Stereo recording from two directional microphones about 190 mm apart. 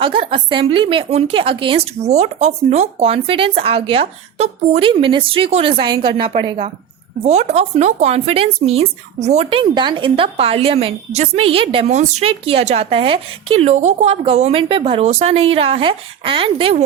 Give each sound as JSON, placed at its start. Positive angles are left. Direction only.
{"t": 0.0, "sound": "a woman's voice", "side_deg": -25}